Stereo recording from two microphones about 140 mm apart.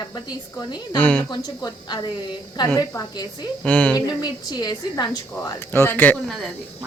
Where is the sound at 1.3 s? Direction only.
30° left (ahead or behind).